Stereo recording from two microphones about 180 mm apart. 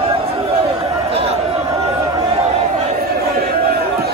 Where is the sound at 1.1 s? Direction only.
35° right (ahead or behind).